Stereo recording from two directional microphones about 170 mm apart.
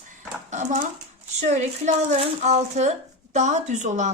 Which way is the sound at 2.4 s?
40° right (ahead or behind).